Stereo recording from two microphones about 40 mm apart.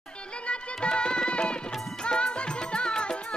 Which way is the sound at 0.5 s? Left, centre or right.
Left.